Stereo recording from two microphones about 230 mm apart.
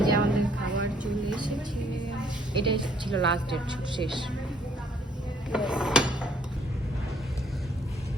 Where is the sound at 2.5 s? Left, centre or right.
Right.